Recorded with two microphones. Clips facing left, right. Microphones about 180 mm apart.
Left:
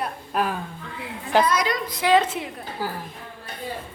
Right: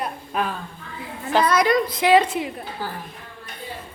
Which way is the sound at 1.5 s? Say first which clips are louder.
Right 4 dB; 60° right (ahead or behind).